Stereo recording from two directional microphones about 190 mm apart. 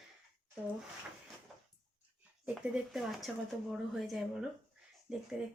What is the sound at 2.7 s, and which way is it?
Speech, centre (ahead or behind).